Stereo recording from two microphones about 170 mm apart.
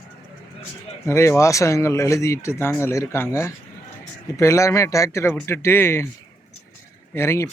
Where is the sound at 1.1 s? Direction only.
15° left (ahead or behind).